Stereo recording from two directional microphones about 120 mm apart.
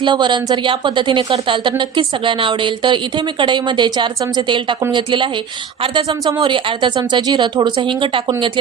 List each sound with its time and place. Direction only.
0.0 s a woman's voice: 40° right (ahead or behind)